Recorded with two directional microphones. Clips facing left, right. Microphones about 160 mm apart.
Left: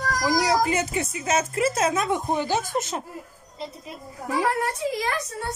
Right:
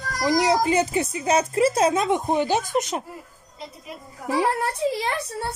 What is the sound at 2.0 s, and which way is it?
Speech, 20° right (ahead or behind).